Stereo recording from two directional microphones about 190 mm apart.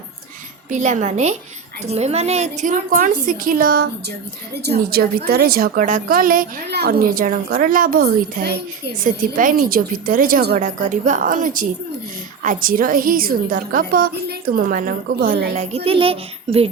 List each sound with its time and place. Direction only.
0.7 s a woman's voice: 40° right (ahead or behind)
15.7 s a child's voice: 30° right (ahead or behind)